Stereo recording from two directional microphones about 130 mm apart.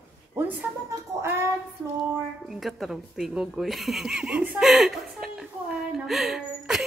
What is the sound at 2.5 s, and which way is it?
Speech, centre (ahead or behind).